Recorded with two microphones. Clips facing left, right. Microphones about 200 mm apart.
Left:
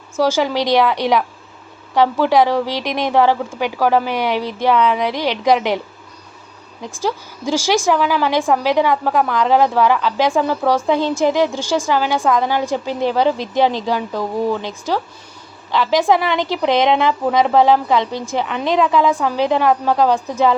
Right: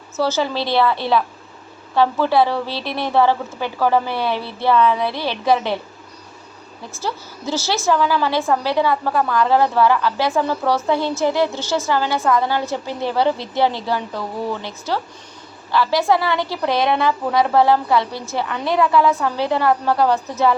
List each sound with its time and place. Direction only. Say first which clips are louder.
0.2 s a woman's voice: left 4 dB; 15° left (ahead or behind)
6.8 s a woman's voice: left 5 dB; 15° left (ahead or behind)